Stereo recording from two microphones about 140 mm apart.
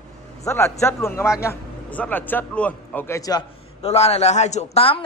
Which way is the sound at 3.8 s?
50° left (ahead or behind).